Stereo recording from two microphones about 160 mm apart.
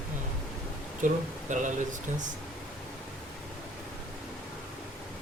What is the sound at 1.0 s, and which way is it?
Speech, 50° right (ahead or behind).